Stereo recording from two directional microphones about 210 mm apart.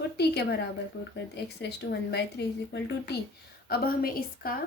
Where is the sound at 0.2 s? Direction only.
50° left (ahead or behind).